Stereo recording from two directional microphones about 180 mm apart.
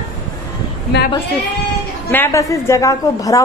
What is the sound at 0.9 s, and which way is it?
Speech, 70° left (ahead or behind).